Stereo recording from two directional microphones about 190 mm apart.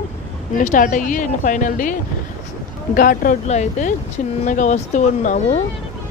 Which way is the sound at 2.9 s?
45° left (ahead or behind).